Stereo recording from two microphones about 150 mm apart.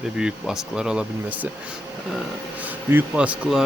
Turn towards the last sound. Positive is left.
turn(degrees=-5)  # may be behind; listen again after turning